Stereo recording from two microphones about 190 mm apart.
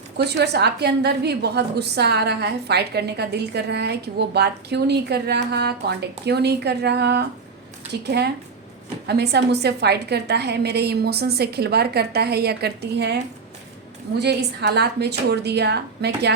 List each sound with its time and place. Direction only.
0.2 s a woman's voice: 60° right (ahead or behind)
14.2 s a woman's voice: 60° right (ahead or behind)